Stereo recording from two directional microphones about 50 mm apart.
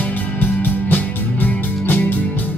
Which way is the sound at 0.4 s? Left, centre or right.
Left.